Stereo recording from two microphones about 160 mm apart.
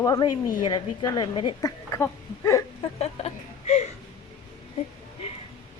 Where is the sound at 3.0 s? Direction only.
40° left (ahead or behind).